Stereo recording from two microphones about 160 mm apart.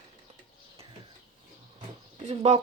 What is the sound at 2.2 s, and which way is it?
Speech, 45° right (ahead or behind).